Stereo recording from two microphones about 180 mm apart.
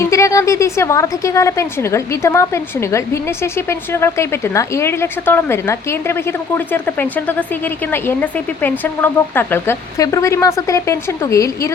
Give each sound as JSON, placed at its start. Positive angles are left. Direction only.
{"t": 0.0, "sound": "a woman's voice", "side_deg": 15}